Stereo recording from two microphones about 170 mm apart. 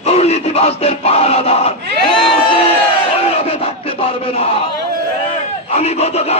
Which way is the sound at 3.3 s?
35° left (ahead or behind).